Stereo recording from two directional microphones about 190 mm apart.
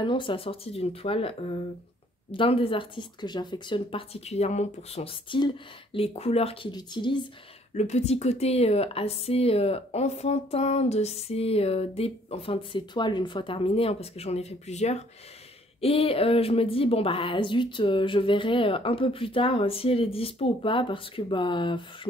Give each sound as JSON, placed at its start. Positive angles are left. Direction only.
{"t": 0.0, "sound": "speech", "side_deg": 25}
{"t": 7.7, "sound": "a woman's voice", "side_deg": 35}